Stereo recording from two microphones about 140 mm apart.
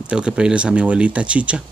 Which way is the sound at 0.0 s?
5° right (ahead or behind).